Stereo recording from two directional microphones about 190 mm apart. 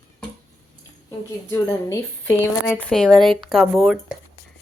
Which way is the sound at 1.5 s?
15° left (ahead or behind).